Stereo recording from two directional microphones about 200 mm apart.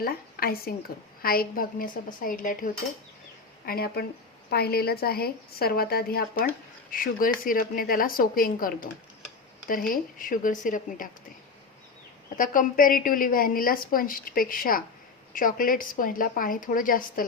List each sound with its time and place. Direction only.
0.0 s a woman's voice: 50° left (ahead or behind)
3.7 s a woman's voice: 50° left (ahead or behind)
12.4 s a woman's voice: 45° left (ahead or behind)